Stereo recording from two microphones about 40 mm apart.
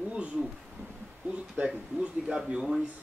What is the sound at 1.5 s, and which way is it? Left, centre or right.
Speech, right.